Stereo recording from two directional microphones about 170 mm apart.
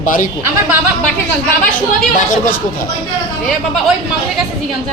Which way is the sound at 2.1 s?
50° left (ahead or behind).